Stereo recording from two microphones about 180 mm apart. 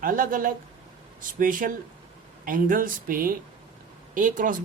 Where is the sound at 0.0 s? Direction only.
50° right (ahead or behind).